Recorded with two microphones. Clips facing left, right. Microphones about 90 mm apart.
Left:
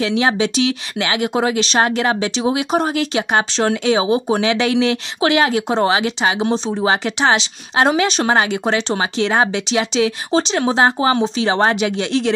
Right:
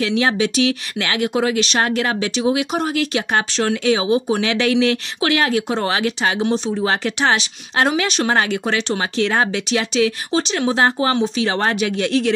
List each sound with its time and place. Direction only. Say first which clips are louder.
0.0 s speech: left 1 dB; 20° left (ahead or behind)
8.0 s speech: left 3 dB; 30° left (ahead or behind)
8.3 s speech: left 2 dB; 20° left (ahead or behind)